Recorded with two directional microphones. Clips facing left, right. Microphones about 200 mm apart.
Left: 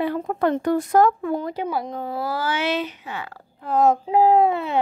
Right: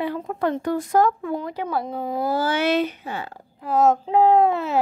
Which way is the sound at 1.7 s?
Centre (ahead or behind).